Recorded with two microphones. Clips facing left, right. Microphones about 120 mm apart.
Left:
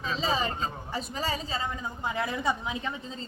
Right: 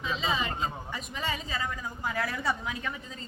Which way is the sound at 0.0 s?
35° left (ahead or behind).